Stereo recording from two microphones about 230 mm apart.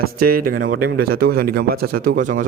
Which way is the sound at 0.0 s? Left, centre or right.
Right.